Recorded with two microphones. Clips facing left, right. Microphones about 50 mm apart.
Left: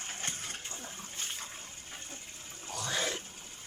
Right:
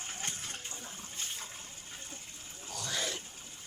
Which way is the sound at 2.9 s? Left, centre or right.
Left.